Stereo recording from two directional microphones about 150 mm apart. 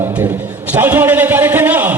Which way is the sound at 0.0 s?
10° right (ahead or behind).